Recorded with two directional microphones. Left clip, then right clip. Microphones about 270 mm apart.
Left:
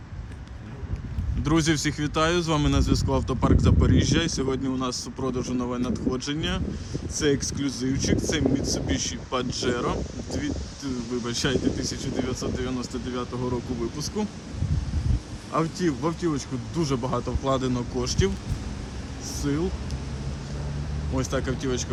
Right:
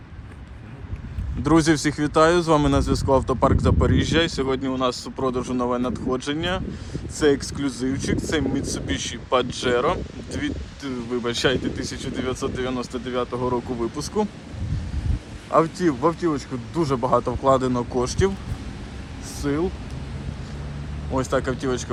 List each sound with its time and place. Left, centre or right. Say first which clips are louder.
1.5 s speech: right 5 dB; centre
15.5 s speech: right 7 dB; centre
17.1 s a man's voice: right 8 dB; right
17.5 s speech: right 6 dB; centre
19.4 s speech: right 4 dB; centre
21.2 s speech: right 5 dB; centre